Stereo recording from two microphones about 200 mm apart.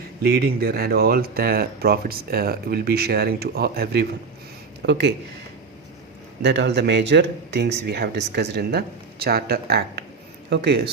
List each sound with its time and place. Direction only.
0.3 s speech: 50° right (ahead or behind)
6.4 s speech: 60° right (ahead or behind)